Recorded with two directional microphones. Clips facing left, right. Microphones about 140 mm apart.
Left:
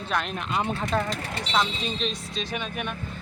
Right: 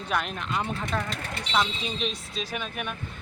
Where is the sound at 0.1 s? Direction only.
5° right (ahead or behind).